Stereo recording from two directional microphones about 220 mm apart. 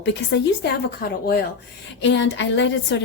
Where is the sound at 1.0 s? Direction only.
45° left (ahead or behind).